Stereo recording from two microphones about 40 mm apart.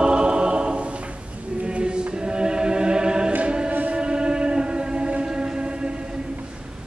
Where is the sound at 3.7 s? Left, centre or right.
Right.